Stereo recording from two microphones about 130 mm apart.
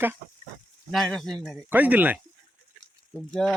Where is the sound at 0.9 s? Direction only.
5° left (ahead or behind).